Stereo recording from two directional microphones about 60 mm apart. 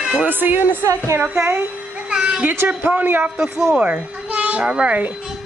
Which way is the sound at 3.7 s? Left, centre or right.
Right.